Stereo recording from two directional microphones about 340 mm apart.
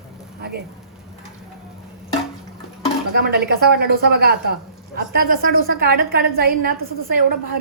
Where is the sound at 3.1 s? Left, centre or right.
Right.